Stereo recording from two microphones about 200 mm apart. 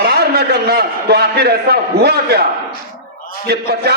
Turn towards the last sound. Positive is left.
turn(degrees=-50)  # may be behind; listen again after turning